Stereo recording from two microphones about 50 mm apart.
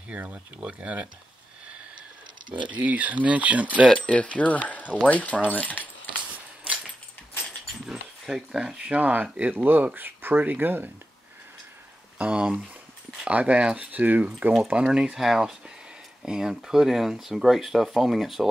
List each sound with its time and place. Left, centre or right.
0.1 s speech: right
2.7 s speech: right
3.9 s a sound: left
5.0 s speech: left
6.3 s a sound: right
7.8 s speech: centre; by 10.9 s right
12.2 s speech: centre
13.9 s speech: right
14.7 s speech: centre